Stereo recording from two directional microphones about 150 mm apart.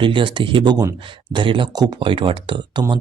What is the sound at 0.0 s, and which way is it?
Speech, 35° right (ahead or behind).